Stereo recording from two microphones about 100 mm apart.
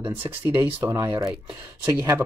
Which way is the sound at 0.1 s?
25° right (ahead or behind).